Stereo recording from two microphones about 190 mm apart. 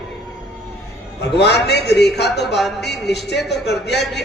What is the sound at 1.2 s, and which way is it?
A man's voice, 65° left (ahead or behind).